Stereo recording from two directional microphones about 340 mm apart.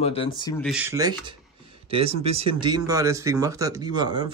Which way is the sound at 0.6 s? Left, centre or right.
Centre.